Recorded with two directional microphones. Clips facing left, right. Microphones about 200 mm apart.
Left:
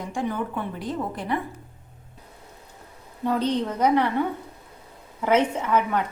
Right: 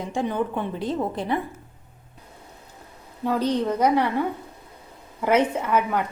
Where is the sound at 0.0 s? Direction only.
20° right (ahead or behind).